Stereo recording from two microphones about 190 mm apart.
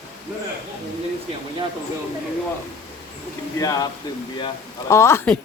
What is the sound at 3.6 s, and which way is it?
A woman's voice, 20° left (ahead or behind).